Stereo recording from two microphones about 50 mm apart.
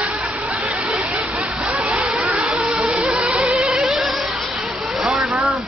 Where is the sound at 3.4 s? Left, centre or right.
Centre.